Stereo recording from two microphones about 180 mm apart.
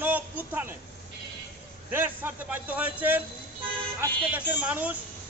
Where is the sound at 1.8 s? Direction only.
10° right (ahead or behind).